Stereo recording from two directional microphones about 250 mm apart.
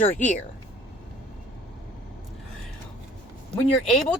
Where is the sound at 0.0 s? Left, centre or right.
Left.